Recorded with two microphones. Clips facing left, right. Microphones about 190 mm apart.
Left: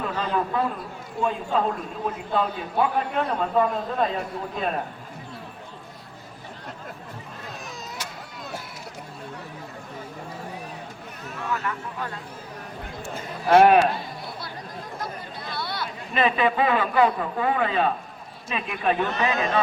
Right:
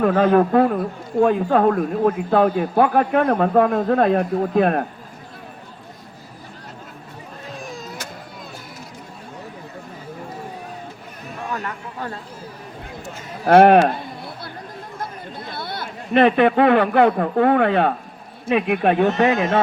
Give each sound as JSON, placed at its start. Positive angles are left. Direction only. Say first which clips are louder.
{"t": 0.0, "sound": "speech", "louder": "right 11 dB", "side_deg": -60}
{"t": 11.5, "sound": "a sound", "louder": "left 1 dB", "side_deg": -40}
{"t": 13.4, "sound": "speech", "louder": "right 4 dB", "side_deg": -55}
{"t": 14.9, "sound": "speech", "louder": "right 3 dB", "side_deg": -55}